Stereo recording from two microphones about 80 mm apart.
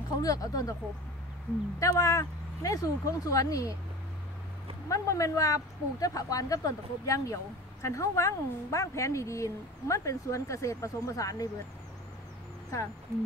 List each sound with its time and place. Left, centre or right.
0.2 s speech: left
1.8 s speech: left
4.8 s a woman's voice: left